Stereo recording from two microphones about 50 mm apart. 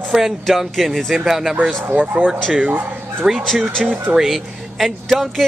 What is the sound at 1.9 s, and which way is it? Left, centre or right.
Speech, right.